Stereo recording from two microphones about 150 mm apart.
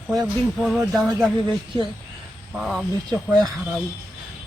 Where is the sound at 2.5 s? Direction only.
5° right (ahead or behind).